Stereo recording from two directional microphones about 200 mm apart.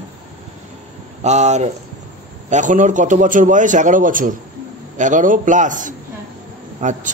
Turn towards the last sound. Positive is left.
turn(degrees=-35)  # may be behind; listen again after turning